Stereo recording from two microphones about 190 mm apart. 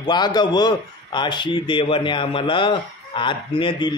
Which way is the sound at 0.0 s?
20° left (ahead or behind).